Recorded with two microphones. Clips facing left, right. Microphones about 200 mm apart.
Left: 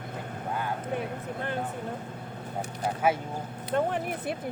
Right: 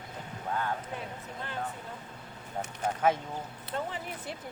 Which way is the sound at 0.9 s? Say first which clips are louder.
Left 7 dB; 55° left (ahead or behind).